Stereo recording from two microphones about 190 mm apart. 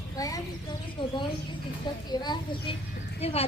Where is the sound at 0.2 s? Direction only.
20° left (ahead or behind).